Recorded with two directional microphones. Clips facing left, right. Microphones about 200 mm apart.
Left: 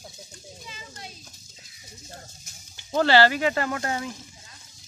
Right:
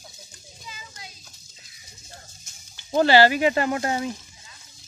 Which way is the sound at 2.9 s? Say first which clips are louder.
Right 2 dB; 15° right (ahead or behind).